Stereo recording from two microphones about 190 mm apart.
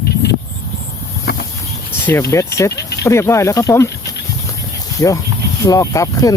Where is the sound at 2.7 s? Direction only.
60° left (ahead or behind).